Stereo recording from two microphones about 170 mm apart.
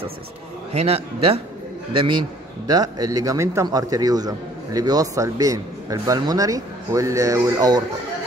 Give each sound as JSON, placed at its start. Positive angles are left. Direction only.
{"t": 0.7, "sound": "a man's voice", "side_deg": -35}